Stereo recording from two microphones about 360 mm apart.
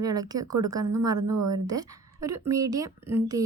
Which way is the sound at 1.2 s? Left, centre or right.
Right.